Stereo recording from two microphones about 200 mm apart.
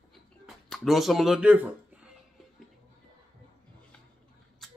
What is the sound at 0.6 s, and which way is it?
Speech, centre (ahead or behind).